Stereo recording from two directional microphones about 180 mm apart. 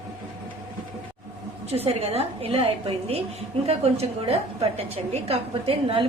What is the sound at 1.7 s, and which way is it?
A woman's voice, 35° right (ahead or behind).